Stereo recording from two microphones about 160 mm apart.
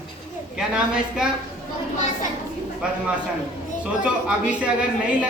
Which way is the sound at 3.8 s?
5° right (ahead or behind).